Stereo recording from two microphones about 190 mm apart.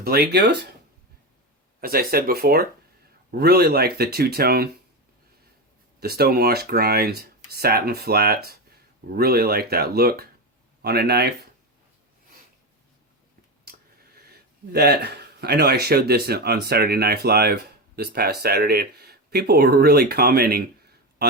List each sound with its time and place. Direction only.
0.0 s speech: 55° right (ahead or behind)
1.8 s speech: 50° right (ahead or behind)
6.0 s speech: 55° right (ahead or behind)
13.7 s a sound: 55° right (ahead or behind)
14.7 s speech: 55° right (ahead or behind)